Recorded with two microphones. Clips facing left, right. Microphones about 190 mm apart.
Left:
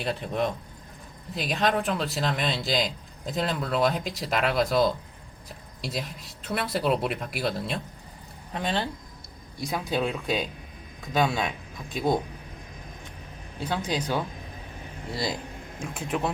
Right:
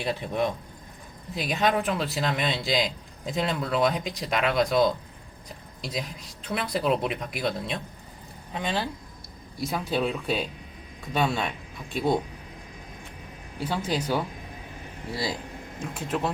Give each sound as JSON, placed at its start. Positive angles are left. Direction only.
{"t": 0.0, "sound": "a man's voice", "side_deg": 0}
{"t": 13.7, "sound": "a man's voice", "side_deg": -10}
{"t": 15.8, "sound": "speech", "side_deg": 10}